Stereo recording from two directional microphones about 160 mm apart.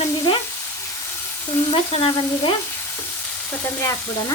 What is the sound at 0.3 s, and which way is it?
Frying, 35° left (ahead or behind).